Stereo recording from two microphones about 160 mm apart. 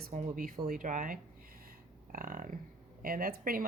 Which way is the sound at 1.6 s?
60° right (ahead or behind).